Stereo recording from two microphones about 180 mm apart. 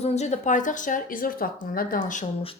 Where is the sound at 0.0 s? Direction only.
35° left (ahead or behind).